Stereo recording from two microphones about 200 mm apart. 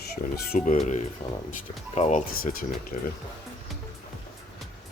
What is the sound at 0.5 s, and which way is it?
Speech, 40° left (ahead or behind).